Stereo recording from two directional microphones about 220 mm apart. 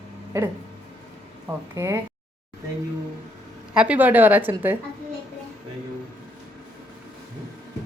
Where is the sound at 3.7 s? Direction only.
5° right (ahead or behind).